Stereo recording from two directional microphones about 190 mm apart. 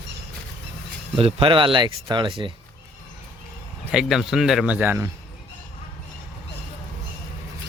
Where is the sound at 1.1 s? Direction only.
30° right (ahead or behind).